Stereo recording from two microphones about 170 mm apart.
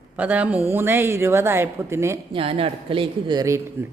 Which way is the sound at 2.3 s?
35° right (ahead or behind).